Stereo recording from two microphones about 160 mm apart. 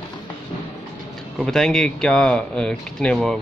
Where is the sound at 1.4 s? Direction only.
5° left (ahead or behind).